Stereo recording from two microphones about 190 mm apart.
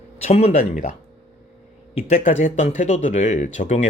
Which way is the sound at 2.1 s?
40° left (ahead or behind).